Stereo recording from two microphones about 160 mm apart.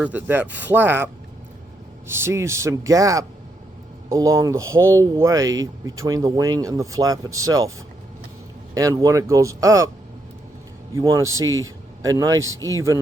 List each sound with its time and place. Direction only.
0.0 s speech: 10° right (ahead or behind)
2.1 s speech: 15° right (ahead or behind)
8.7 s speech: 20° right (ahead or behind)
10.9 s speech: 20° right (ahead or behind)